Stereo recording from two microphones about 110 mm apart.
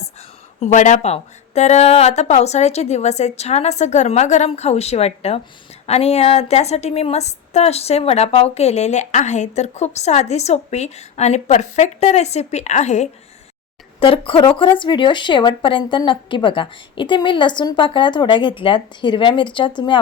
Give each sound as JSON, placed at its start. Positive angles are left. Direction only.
{"t": 0.6, "sound": "a woman's voice", "side_deg": 85}
{"t": 14.0, "sound": "a woman's voice", "side_deg": 55}